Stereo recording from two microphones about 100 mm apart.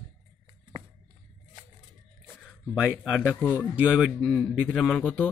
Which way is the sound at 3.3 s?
30° left (ahead or behind).